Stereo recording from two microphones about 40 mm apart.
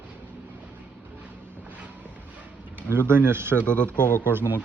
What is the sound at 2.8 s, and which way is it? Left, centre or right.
Speech, right.